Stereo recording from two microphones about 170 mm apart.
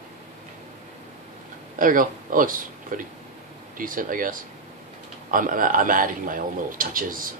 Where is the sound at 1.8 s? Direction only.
55° right (ahead or behind).